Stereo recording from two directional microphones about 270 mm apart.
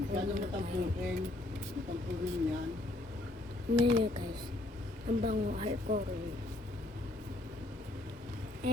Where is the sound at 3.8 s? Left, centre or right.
Centre.